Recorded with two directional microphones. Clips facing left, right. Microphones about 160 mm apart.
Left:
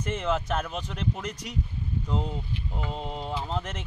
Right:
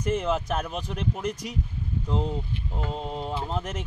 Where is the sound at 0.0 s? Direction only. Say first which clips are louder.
Right 2 dB; 5° right (ahead or behind).